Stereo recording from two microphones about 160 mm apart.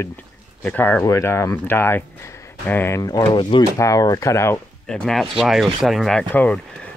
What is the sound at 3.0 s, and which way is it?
Speech, 25° left (ahead or behind).